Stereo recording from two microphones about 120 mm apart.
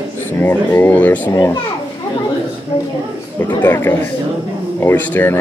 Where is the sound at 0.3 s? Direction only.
15° left (ahead or behind).